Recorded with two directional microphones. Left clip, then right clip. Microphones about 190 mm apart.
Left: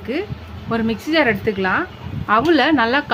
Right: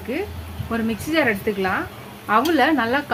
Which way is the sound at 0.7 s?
25° left (ahead or behind).